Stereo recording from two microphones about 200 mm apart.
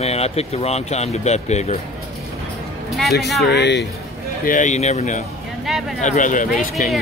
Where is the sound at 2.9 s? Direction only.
Centre (ahead or behind).